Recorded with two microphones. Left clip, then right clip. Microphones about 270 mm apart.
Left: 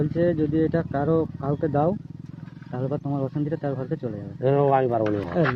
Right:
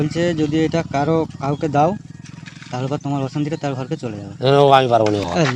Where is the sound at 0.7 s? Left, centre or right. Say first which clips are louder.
Right 5 dB; right.